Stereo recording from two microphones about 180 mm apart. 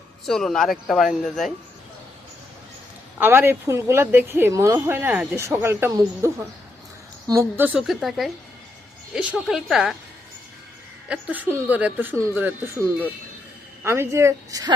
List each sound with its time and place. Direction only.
0.3 s speech: centre (ahead or behind)
3.2 s speech: 10° right (ahead or behind)
11.1 s speech: 10° right (ahead or behind)